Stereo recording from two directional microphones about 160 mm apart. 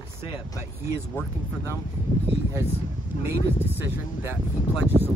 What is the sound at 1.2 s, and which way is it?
Speech, 15° left (ahead or behind).